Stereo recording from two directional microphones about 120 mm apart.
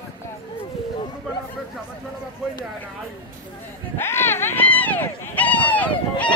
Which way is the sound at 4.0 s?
20° left (ahead or behind).